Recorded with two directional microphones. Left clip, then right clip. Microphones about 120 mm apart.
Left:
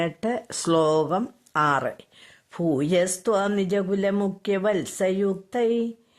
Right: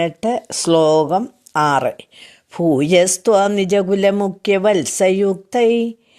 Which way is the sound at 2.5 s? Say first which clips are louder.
Right 9 dB; 40° right (ahead or behind).